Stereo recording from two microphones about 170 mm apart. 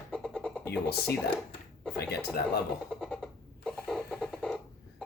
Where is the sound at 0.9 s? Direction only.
15° left (ahead or behind).